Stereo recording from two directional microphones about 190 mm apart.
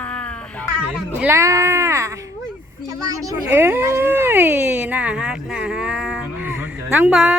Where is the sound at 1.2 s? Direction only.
15° right (ahead or behind).